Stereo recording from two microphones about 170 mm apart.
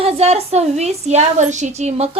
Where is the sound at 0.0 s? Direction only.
35° right (ahead or behind).